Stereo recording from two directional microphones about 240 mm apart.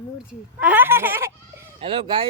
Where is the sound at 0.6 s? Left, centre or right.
Centre.